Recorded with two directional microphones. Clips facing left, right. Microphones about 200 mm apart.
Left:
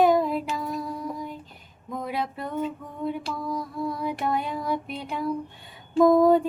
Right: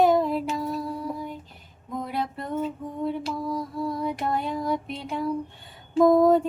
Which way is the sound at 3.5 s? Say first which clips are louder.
Left 1 dB; 25° right (ahead or behind).